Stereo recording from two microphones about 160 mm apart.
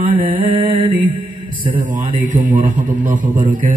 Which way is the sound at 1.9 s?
50° right (ahead or behind).